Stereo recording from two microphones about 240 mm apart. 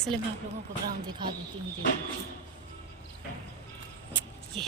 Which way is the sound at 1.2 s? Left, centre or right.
Centre.